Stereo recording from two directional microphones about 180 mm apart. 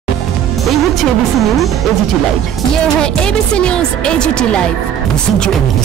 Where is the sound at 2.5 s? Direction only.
Centre (ahead or behind).